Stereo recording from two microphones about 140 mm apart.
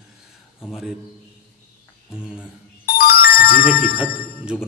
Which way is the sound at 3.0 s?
90° left.